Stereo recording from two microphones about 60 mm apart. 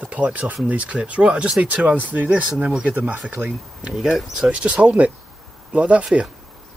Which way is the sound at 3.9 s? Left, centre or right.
Centre.